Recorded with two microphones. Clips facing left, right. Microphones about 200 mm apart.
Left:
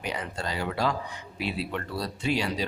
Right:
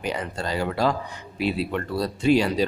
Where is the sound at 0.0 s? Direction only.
40° right (ahead or behind).